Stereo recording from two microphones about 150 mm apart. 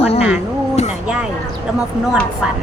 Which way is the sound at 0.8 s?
45° left (ahead or behind).